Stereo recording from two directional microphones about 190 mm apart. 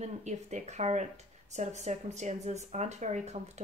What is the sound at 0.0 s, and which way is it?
Speech, 40° right (ahead or behind).